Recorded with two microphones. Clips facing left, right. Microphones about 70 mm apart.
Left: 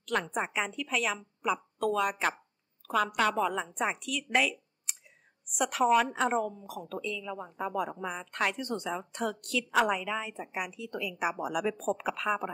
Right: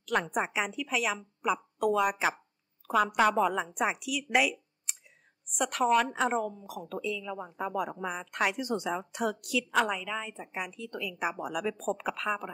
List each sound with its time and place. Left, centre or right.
0.0 s a woman's voice: centre